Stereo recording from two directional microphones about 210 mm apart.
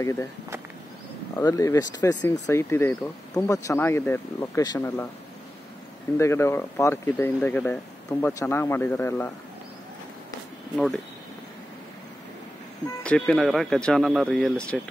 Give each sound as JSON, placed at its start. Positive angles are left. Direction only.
{"t": 0.0, "sound": "speech", "side_deg": 15}
{"t": 1.4, "sound": "speech", "side_deg": 15}
{"t": 6.1, "sound": "speech", "side_deg": 10}
{"t": 12.8, "sound": "speech", "side_deg": 5}